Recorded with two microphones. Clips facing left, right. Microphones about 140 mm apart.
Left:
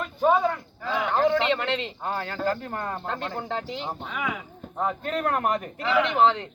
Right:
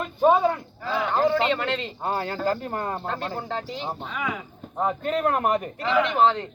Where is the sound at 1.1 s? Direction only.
10° right (ahead or behind).